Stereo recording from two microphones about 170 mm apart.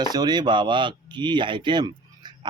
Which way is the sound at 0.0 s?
25° right (ahead or behind).